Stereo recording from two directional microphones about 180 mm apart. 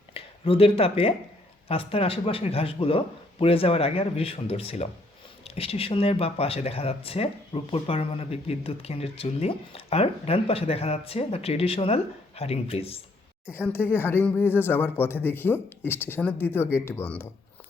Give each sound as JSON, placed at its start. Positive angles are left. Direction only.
{"t": 0.1, "sound": "speech", "side_deg": 30}
{"t": 13.5, "sound": "speech", "side_deg": 10}